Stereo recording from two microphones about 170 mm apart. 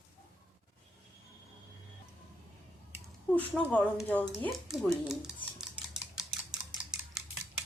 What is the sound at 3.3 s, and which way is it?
Speech, 10° left (ahead or behind).